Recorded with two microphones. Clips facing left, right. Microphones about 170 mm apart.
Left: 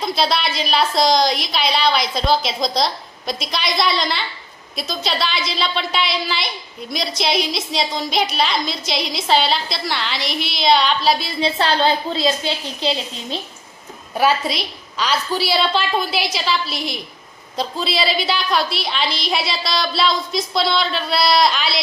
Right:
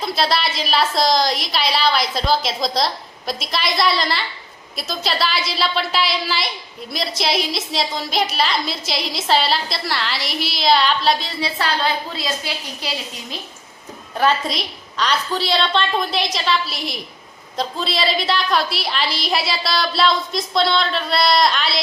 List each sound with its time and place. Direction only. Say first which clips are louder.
0.0 s a woman's voice: even; centre (ahead or behind)
11.3 s a woman's voice: left 4 dB; 25° left (ahead or behind)
14.2 s a woman's voice: left 1 dB; 5° left (ahead or behind)